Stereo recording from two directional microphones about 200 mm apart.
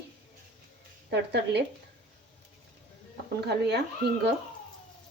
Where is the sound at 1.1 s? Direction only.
60° right (ahead or behind).